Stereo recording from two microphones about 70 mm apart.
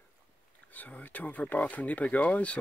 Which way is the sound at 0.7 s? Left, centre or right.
Left.